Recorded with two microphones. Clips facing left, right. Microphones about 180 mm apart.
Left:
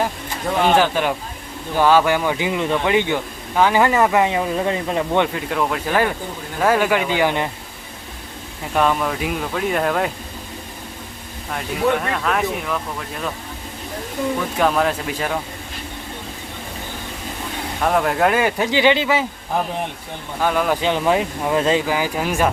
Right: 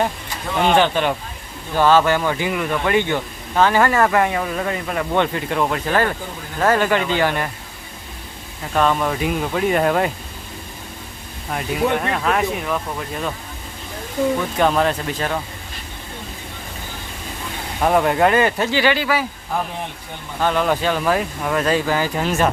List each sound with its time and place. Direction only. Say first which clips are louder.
0.8 s speech: right 1 dB; 5° left (ahead or behind); by 5.2 s 25° left (ahead or behind)
5.3 s speech: right 1 dB; centre (ahead or behind); by 7.5 s 20° left (ahead or behind)
8.7 s speech: even; 10° left (ahead or behind)
11.5 s speech: even; 5° right (ahead or behind)
14.6 s speech: even; centre (ahead or behind)
17.8 s speech: right 2 dB; 5° right (ahead or behind); by 19.2 s 20° left (ahead or behind)
20.4 s speech: even; 10° left (ahead or behind)
20.8 s speech: left 1 dB; 20° left (ahead or behind)
21.8 s speech: right 1 dB; 10° left (ahead or behind)